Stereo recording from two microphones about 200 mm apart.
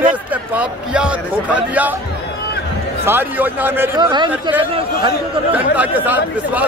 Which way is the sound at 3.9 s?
20° right (ahead or behind).